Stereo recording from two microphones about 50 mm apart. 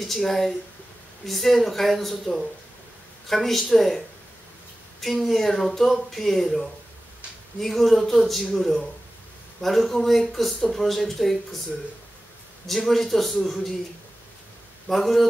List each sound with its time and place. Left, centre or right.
0.0 s speech: centre
5.0 s speech: centre
12.6 s speech: centre
14.9 s speech: centre